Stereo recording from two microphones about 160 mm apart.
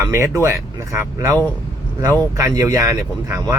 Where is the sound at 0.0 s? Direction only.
20° right (ahead or behind).